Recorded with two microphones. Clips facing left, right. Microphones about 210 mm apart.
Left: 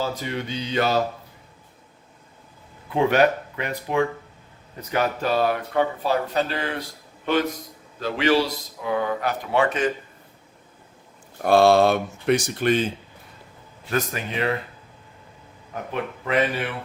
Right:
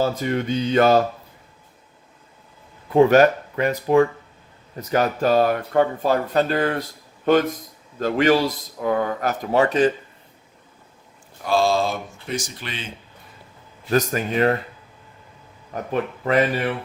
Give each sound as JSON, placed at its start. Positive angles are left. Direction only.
{"t": 0.0, "sound": "speech", "side_deg": -50}
{"t": 2.9, "sound": "speech", "side_deg": -40}
{"t": 7.9, "sound": "speech", "side_deg": -45}
{"t": 11.4, "sound": "speech", "side_deg": 60}
{"t": 13.9, "sound": "speech", "side_deg": -45}
{"t": 15.9, "sound": "speech", "side_deg": -40}